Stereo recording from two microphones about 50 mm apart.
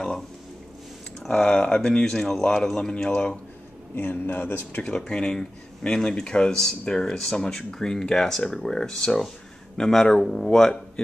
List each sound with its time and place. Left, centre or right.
1.2 s speech: centre
4.1 s speech: left
4.8 s speech: centre